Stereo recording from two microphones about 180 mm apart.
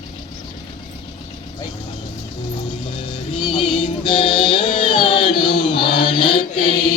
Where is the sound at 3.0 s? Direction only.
30° left (ahead or behind).